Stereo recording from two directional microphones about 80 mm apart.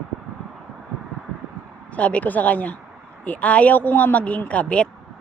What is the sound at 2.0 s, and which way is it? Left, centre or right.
Speech, centre.